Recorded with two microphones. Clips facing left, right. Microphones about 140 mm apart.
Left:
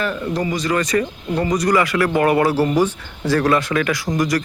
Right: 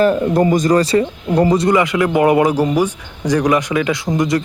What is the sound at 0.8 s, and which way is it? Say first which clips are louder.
Speech: right 5 dB; 30° right (ahead or behind).